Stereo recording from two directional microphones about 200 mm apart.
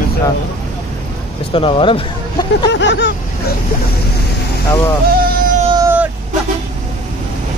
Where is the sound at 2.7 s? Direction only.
60° left (ahead or behind).